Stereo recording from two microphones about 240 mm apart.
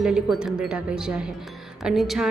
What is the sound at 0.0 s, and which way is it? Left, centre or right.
A woman's voice, centre.